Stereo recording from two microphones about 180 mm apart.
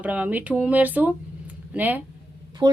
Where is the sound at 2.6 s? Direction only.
25° right (ahead or behind).